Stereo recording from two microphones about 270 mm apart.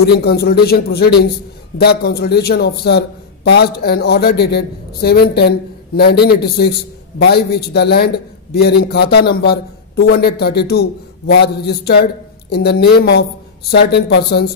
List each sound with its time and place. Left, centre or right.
0.0 s a man's voice: left